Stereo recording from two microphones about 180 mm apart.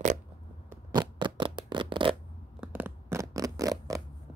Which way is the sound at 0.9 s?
25° right (ahead or behind).